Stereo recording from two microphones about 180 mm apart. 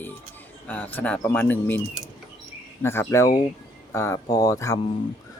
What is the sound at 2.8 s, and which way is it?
Speech, 15° left (ahead or behind).